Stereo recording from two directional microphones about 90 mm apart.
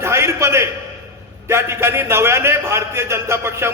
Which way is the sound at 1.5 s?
30° right (ahead or behind).